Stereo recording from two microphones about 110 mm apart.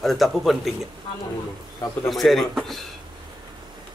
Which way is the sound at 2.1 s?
Centre (ahead or behind).